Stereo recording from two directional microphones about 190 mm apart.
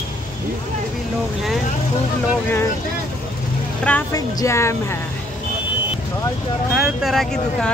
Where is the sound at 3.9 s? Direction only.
10° left (ahead or behind).